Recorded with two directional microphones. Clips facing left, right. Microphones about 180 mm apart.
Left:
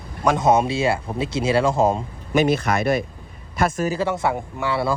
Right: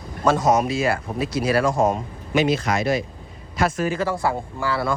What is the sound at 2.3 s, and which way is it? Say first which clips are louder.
Speech: left 1 dB; 55° left (ahead or behind).